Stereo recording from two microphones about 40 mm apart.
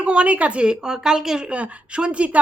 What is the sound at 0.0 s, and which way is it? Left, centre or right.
A woman's voice, right.